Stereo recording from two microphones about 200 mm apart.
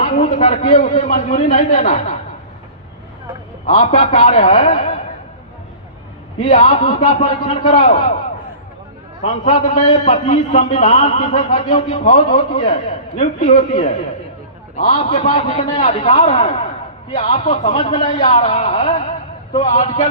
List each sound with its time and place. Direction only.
0.0 s a man's voice: 40° left (ahead or behind)
3.7 s a man's voice: 35° left (ahead or behind)
6.4 s a man's voice: 40° left (ahead or behind)
9.2 s a man's voice: 35° left (ahead or behind)